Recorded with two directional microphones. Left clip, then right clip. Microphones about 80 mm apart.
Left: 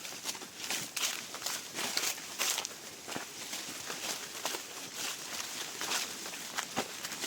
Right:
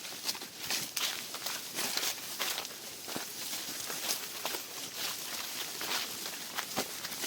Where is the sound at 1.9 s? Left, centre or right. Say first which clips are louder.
Even; left.